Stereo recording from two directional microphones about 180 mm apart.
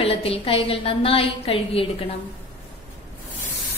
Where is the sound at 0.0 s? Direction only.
35° left (ahead or behind).